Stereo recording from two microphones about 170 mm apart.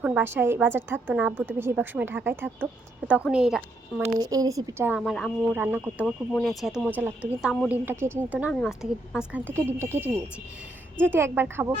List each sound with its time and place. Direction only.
0.0 s a woman's voice: 10° right (ahead or behind)
4.2 s speech: 20° right (ahead or behind)
4.9 s speech: centre (ahead or behind)
5.5 s a woman's voice: 10° right (ahead or behind)
6.3 s a woman's voice: centre (ahead or behind)